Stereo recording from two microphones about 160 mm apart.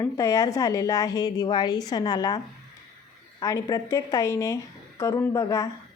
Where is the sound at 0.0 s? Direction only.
20° left (ahead or behind).